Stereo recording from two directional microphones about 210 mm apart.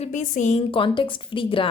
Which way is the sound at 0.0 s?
35° left (ahead or behind).